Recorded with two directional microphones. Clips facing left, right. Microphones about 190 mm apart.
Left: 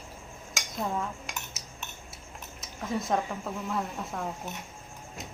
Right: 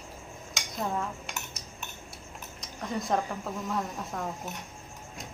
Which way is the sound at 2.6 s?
Centre (ahead or behind).